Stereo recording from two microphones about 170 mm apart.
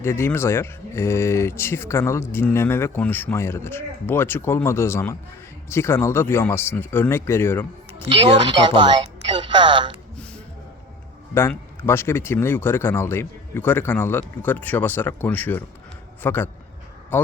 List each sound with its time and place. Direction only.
0.0 s speech: 15° left (ahead or behind)
8.1 s speech: 30° right (ahead or behind)
11.3 s speech: 15° left (ahead or behind)